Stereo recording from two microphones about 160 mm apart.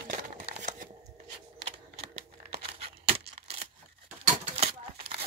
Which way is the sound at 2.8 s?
40° right (ahead or behind).